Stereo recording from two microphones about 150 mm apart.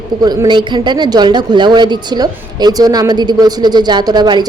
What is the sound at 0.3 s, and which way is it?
Speech, 30° right (ahead or behind).